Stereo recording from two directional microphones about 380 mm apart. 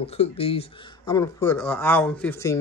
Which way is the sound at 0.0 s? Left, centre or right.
Centre.